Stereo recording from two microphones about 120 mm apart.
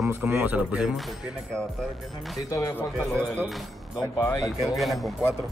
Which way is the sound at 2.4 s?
25° left (ahead or behind).